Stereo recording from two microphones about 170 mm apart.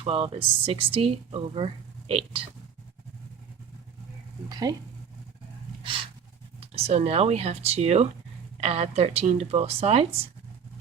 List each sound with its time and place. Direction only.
0.0 s speech: 35° right (ahead or behind)
4.7 s speech: 20° right (ahead or behind)
5.8 s a sound: 30° right (ahead or behind)
6.6 s speech: 35° right (ahead or behind)